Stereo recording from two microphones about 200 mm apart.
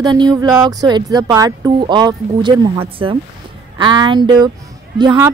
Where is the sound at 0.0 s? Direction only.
20° right (ahead or behind).